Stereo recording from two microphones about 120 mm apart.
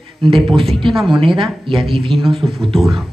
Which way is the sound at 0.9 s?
Centre (ahead or behind).